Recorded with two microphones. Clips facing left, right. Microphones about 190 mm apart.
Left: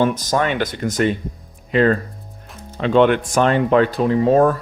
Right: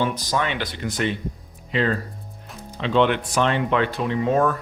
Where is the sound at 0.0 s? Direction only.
45° left (ahead or behind).